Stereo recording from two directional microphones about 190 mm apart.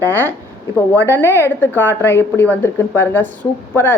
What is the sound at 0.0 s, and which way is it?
A woman's voice, 10° left (ahead or behind).